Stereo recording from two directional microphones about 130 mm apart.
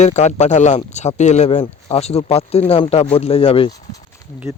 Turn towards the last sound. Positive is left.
turn(degrees=-25)  # may be behind; listen again after turning